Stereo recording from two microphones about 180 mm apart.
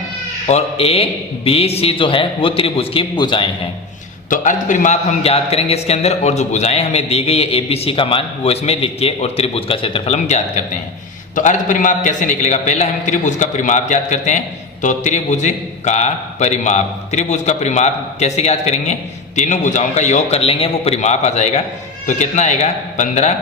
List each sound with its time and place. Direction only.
0.4 s a man's voice: 35° left (ahead or behind)
4.3 s a man's voice: 45° left (ahead or behind)